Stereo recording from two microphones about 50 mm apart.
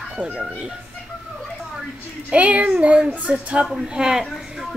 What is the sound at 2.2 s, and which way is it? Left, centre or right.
A woman's voice, right.